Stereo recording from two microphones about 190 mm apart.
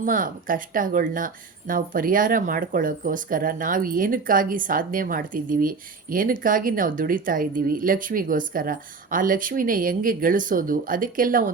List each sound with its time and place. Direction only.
0.0 s speech: 45° right (ahead or behind)